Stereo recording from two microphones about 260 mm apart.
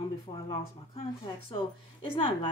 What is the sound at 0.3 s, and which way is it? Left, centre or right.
A woman's voice, centre.